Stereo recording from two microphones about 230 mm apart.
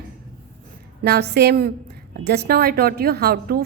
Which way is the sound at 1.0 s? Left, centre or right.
Right.